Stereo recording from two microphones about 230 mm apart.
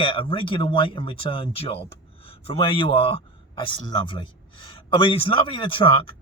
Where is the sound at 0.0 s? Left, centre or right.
Left.